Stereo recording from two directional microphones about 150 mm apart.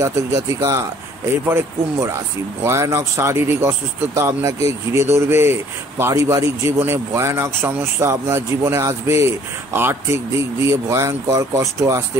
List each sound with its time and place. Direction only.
0.0 s speech: 20° right (ahead or behind)